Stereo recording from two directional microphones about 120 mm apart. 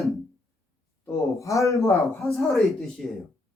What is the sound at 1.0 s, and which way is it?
Speech, 25° left (ahead or behind).